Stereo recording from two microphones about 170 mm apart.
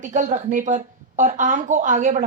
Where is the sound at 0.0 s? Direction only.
50° right (ahead or behind).